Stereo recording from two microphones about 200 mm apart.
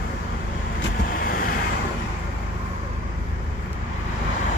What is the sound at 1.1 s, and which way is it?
Vehicle, 45° left (ahead or behind).